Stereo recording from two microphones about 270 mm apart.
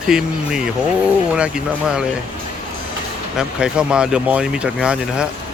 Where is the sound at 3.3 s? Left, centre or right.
Centre.